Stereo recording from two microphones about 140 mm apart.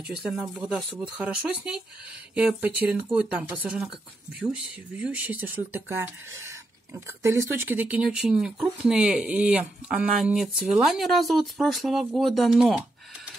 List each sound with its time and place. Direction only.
0.1 s speech: 5° right (ahead or behind)